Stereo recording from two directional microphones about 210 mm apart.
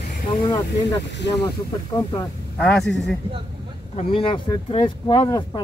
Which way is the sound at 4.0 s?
25° left (ahead or behind).